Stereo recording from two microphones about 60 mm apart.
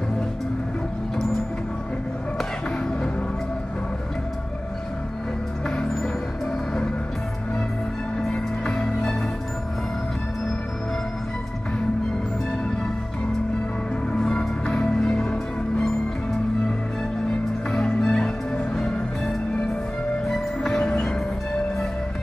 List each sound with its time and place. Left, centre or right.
8.2 s music: centre
14.1 s music: centre
17.6 s music: centre